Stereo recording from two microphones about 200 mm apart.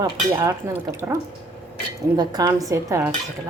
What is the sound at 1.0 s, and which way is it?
Speech, 15° right (ahead or behind).